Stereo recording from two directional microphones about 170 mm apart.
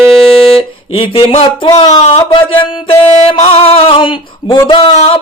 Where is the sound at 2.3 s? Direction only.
30° left (ahead or behind).